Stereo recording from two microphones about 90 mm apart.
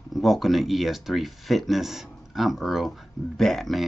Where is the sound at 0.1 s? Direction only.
Centre (ahead or behind).